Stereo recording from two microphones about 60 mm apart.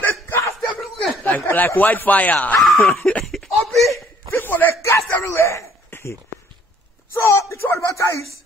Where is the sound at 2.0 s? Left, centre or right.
Left.